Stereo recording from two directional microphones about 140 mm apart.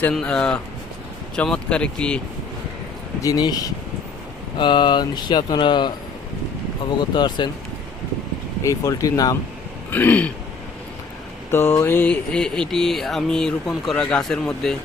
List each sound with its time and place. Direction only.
0.0 s speech: 5° left (ahead or behind)
3.2 s speech: 25° left (ahead or behind)
7.1 s speech: 35° left (ahead or behind)
8.6 s speech: 25° left (ahead or behind)
9.9 s speech: 10° left (ahead or behind)
11.5 s a sound: 15° left (ahead or behind)